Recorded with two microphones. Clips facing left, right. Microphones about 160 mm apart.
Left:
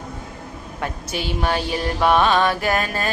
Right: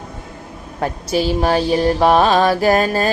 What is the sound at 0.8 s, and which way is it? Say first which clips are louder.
Mantra: right 9 dB; 35° right (ahead or behind).